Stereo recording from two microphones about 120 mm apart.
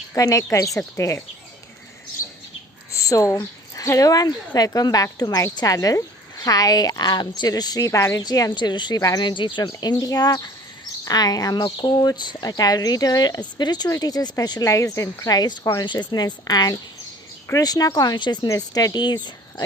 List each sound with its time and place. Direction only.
0.1 s a woman's voice: 25° left (ahead or behind)
2.9 s speech: 25° left (ahead or behind)
9.0 s a woman's voice: 25° left (ahead or behind)
9.2 s speech: 40° left (ahead or behind)